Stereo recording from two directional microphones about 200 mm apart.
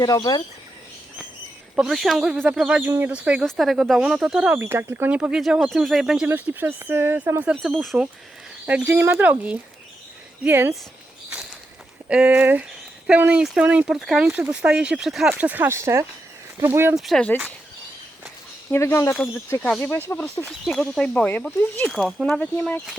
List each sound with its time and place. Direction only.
0.0 s speech: 20° left (ahead or behind)
1.7 s speech: centre (ahead or behind)
12.0 s speech: 5° right (ahead or behind)
17.0 s speech: centre (ahead or behind)
18.7 s speech: 10° left (ahead or behind)